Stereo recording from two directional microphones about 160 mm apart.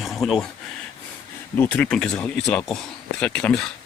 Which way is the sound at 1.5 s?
10° left (ahead or behind).